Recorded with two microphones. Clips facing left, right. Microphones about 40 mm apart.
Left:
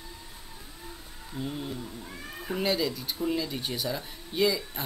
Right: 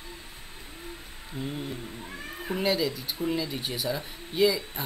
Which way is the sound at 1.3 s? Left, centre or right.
Centre.